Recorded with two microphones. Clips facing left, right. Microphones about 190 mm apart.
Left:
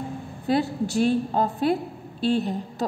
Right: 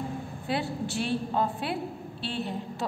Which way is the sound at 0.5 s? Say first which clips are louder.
Left 7 dB; 40° left (ahead or behind).